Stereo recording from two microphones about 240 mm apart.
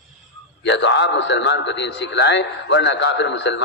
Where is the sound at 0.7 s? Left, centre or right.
Left.